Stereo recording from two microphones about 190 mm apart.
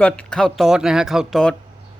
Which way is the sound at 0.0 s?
5° left (ahead or behind).